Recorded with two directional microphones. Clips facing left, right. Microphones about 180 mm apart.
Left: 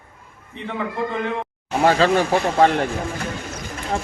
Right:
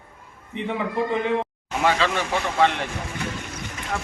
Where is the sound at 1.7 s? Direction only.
35° left (ahead or behind).